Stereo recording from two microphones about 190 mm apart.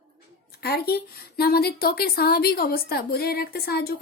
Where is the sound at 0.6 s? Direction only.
55° left (ahead or behind).